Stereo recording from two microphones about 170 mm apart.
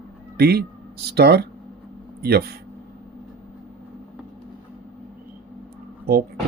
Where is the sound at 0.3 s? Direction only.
70° right (ahead or behind).